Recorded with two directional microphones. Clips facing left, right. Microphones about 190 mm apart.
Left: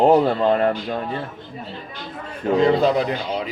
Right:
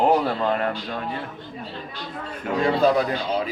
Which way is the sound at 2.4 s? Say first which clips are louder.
Left 3 dB; 20° left (ahead or behind).